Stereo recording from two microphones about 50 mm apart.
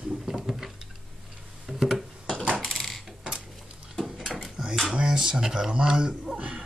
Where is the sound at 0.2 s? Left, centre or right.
Centre.